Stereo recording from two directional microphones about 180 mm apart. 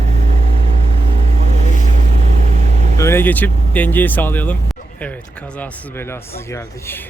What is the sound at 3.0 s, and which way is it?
Speech, 15° left (ahead or behind).